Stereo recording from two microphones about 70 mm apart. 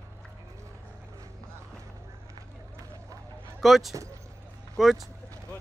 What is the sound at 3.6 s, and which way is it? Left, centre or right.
Speech, centre.